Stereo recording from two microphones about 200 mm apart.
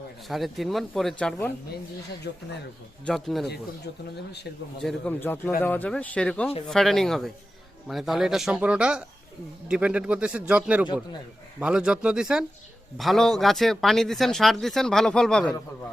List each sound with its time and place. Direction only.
0.3 s speech: centre (ahead or behind)
2.3 s speech: 55° left (ahead or behind)
3.1 s speech: centre (ahead or behind)
4.8 s speech: 5° left (ahead or behind)